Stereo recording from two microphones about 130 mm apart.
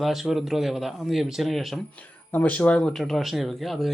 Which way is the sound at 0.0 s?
Centre (ahead or behind).